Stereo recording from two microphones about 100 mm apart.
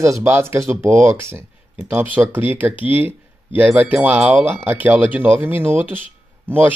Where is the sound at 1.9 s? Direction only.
15° right (ahead or behind).